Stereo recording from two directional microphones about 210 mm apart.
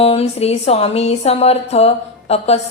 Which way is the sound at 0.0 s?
30° left (ahead or behind).